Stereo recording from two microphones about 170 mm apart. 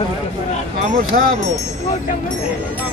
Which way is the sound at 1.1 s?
70° right (ahead or behind).